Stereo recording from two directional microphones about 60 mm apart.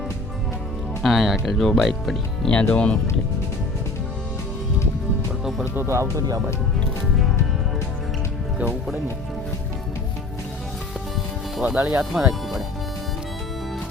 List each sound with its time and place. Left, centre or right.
1.0 s speech: centre
2.5 s speech: left
5.7 s speech: right
11.6 s speech: right
12.1 s music: centre